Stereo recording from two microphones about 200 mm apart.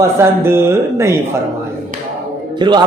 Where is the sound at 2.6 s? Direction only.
20° right (ahead or behind).